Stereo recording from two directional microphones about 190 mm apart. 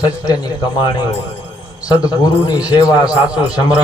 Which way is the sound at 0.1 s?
20° left (ahead or behind).